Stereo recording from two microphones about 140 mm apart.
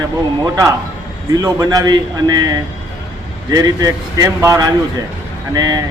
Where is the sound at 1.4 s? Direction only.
25° right (ahead or behind).